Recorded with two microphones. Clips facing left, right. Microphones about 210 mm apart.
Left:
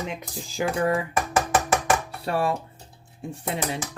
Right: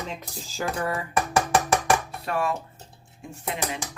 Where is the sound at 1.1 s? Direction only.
Centre (ahead or behind).